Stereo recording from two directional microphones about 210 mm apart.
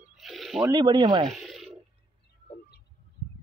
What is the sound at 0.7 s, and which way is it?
Speech, 20° right (ahead or behind).